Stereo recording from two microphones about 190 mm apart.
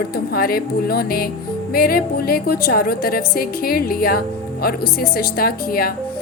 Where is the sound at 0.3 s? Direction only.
50° left (ahead or behind).